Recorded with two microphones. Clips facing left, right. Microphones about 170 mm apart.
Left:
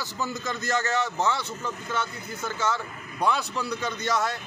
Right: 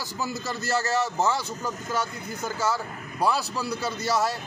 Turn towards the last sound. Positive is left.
turn(degrees=-5)  # may be behind; listen again after turning